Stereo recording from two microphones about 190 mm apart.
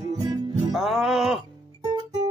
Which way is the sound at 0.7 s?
Centre (ahead or behind).